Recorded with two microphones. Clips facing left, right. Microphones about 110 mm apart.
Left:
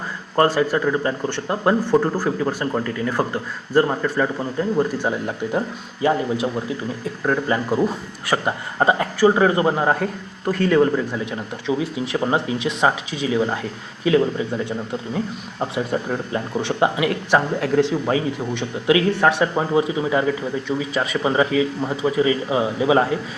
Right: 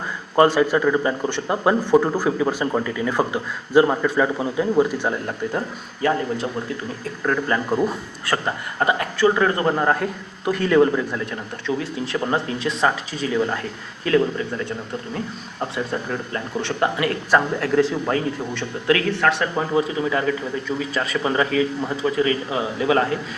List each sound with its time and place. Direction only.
0.4 s a man's voice: 5° left (ahead or behind)
2.5 s speech: 15° right (ahead or behind)
2.8 s a man's voice: 5° right (ahead or behind)
5.2 s speech: 10° left (ahead or behind)
8.8 s speech: 25° left (ahead or behind)
18.0 s a man's voice: 5° left (ahead or behind)
18.9 s speech: 15° left (ahead or behind)